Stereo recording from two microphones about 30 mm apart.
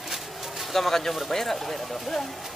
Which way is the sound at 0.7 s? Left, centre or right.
Centre.